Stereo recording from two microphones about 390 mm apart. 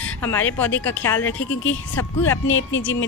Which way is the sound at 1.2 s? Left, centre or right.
Left.